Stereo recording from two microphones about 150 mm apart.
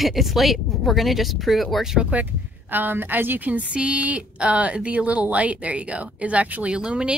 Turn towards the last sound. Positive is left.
turn(degrees=-5)  # may be behind; listen again after turning